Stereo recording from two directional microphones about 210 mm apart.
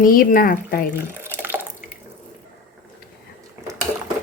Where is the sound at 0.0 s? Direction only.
40° left (ahead or behind).